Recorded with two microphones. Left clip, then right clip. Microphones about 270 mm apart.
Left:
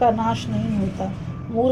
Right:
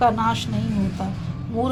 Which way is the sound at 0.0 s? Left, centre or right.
Right.